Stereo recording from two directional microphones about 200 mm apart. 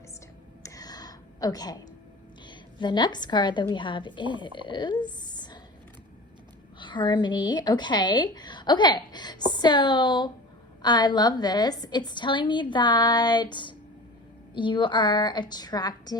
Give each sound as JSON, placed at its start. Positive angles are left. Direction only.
{"t": 0.6, "sound": "a sound", "side_deg": 15}
{"t": 2.5, "sound": "a woman's voice", "side_deg": 20}
{"t": 6.7, "sound": "a woman's voice", "side_deg": 25}